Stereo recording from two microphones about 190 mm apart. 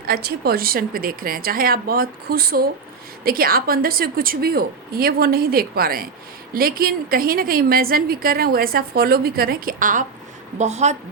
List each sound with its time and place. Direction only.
0.0 s a woman's voice: 55° right (ahead or behind); by 10.9 s 35° right (ahead or behind)